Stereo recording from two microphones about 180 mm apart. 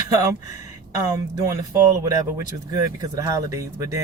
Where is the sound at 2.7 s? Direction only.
20° right (ahead or behind).